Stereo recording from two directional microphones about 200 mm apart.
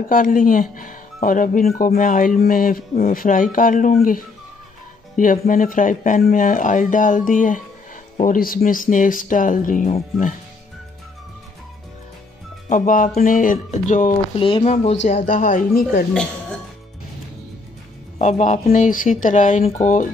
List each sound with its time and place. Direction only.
0.1 s speech: 40° left (ahead or behind)
12.6 s speech: 40° left (ahead or behind)
18.2 s speech: 40° left (ahead or behind)